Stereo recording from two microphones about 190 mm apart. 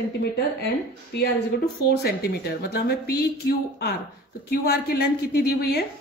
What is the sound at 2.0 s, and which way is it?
A woman's voice, 55° left (ahead or behind).